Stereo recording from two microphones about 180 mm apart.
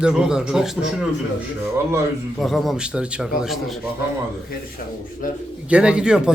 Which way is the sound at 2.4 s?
Centre (ahead or behind).